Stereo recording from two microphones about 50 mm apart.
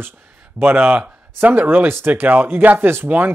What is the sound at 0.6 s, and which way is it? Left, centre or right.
Speech, right.